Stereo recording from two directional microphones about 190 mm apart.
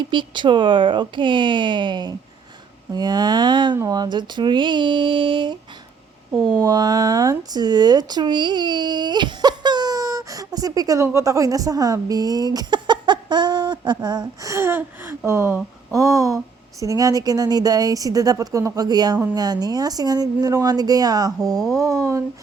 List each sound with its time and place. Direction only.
0.1 s speech: 25° right (ahead or behind)
6.3 s speech: centre (ahead or behind)
6.6 s speech: 20° right (ahead or behind)